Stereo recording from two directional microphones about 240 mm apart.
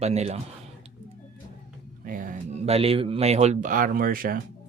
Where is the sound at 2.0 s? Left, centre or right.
Right.